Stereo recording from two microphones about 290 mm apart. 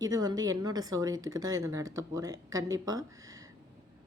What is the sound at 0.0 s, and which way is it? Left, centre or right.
Speech, centre.